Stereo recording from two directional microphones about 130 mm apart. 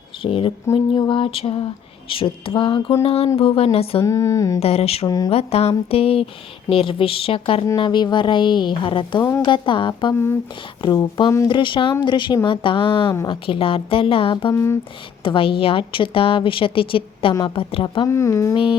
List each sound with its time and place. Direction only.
0.2 s a woman's voice: 45° left (ahead or behind)
0.7 s a woman's voice: 30° left (ahead or behind); by 4.0 s 50° left (ahead or behind)
4.0 s a sound: 25° left (ahead or behind)
4.6 s a woman's voice: 50° left (ahead or behind)
5.0 s speech: 30° left (ahead or behind)
5.3 s a woman's voice: 50° left (ahead or behind)
14.5 s a sound: 20° left (ahead or behind)
15.2 s a woman's voice: 40° left (ahead or behind)
18.1 s a sound: 25° left (ahead or behind)
18.5 s speech: 40° left (ahead or behind)